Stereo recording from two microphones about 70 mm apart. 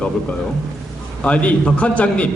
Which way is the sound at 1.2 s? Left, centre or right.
Centre.